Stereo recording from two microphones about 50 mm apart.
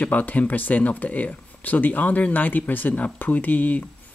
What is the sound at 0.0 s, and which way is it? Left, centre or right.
Speech, left.